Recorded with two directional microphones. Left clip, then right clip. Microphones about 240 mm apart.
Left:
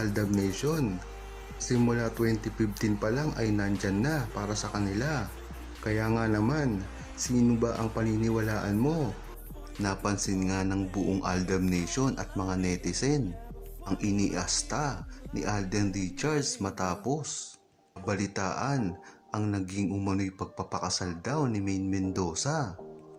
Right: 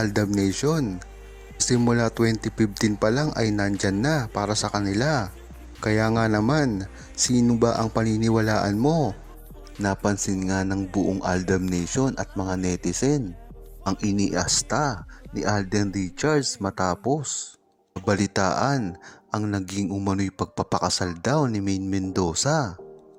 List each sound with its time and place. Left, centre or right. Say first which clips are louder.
0.0 s speech: right 6 dB; right
9.8 s speech: right 6 dB; right